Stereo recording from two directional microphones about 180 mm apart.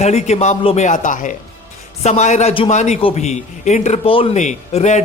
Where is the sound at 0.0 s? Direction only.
40° left (ahead or behind).